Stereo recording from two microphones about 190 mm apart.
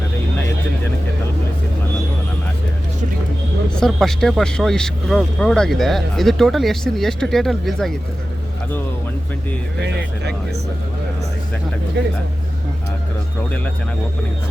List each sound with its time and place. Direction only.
3.8 s speech: centre (ahead or behind)
9.8 s speech: 65° right (ahead or behind)